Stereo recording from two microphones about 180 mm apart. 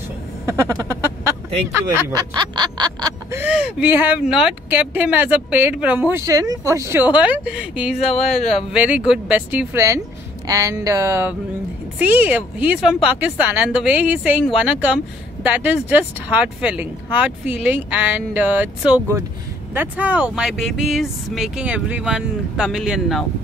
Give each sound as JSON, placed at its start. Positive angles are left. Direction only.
{"t": 0.5, "sound": "speech", "side_deg": -15}
{"t": 2.0, "sound": "speech", "side_deg": -20}